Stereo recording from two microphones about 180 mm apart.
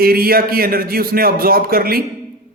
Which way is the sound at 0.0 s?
55° right (ahead or behind).